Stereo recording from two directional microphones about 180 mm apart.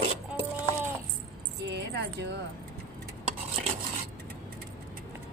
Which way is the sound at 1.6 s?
70° right (ahead or behind).